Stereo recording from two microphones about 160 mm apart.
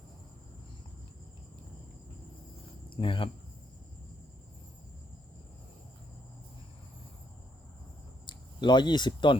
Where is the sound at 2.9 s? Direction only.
30° left (ahead or behind).